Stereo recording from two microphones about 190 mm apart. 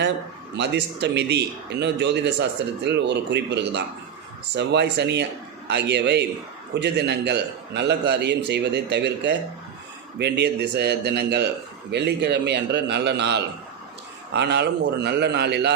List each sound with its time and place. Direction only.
0.5 s a man's voice: 65° right (ahead or behind)